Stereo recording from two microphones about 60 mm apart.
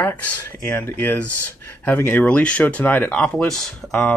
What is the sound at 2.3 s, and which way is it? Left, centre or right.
Speech, centre.